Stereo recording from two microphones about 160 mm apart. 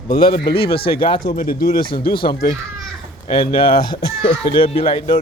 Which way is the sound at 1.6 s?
60° left (ahead or behind).